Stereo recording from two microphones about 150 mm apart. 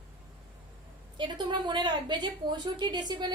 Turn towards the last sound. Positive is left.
turn(degrees=-25)  # may be behind; listen again after turning